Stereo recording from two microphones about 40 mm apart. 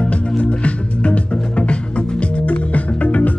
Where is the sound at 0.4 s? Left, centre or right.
Left.